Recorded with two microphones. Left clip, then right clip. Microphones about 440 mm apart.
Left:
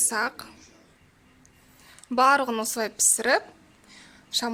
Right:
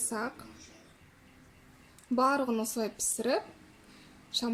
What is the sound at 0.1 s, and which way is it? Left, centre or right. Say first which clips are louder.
Speech: left 7 dB; left.